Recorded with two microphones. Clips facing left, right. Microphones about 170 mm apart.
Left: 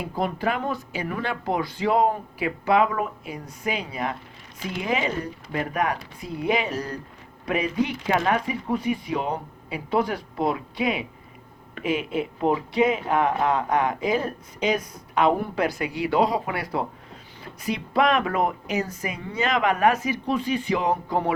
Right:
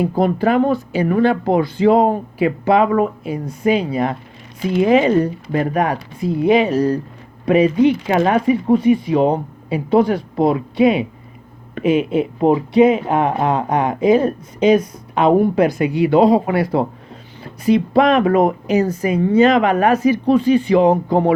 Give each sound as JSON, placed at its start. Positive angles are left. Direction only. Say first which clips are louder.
{"t": 0.0, "sound": "speech", "louder": "right 10 dB", "side_deg": -35}
{"t": 4.9, "sound": "speech", "louder": "right 13 dB", "side_deg": -65}
{"t": 5.5, "sound": "speech", "louder": "right 8 dB", "side_deg": -35}